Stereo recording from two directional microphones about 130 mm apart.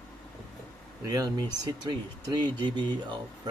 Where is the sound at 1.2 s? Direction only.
30° right (ahead or behind).